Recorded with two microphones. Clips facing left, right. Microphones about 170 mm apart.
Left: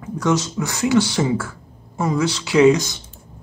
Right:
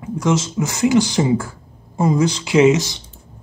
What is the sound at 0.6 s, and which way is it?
Speech, 15° right (ahead or behind).